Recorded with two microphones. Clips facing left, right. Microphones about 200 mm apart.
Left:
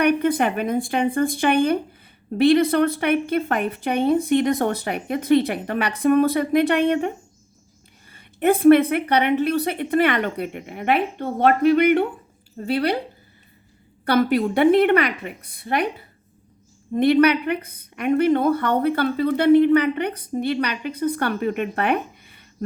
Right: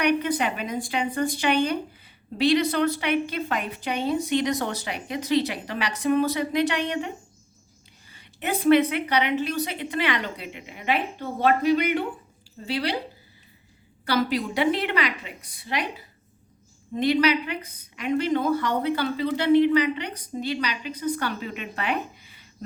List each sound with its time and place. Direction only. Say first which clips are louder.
0.0 s speech: left 5 dB; 55° left (ahead or behind)
8.1 s speech: left 10 dB; 55° left (ahead or behind)
14.0 s speech: left 6 dB; 55° left (ahead or behind)